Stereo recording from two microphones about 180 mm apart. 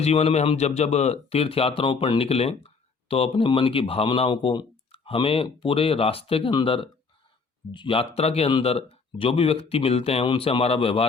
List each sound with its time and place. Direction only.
0.0 s speech: 35° left (ahead or behind)